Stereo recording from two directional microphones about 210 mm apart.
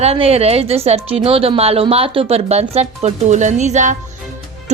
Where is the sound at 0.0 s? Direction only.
30° right (ahead or behind).